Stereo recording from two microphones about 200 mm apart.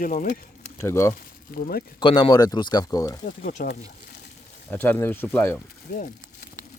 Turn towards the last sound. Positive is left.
turn(degrees=45)  # may be behind; listen again after turning